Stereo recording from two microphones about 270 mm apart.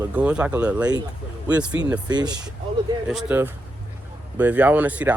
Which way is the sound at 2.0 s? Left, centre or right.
Centre.